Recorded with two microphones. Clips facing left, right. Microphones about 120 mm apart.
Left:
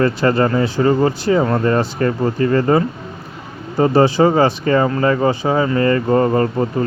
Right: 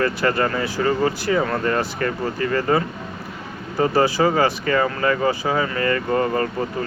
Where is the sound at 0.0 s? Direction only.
25° left (ahead or behind).